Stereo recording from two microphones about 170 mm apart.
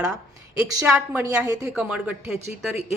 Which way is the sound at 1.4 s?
20° right (ahead or behind).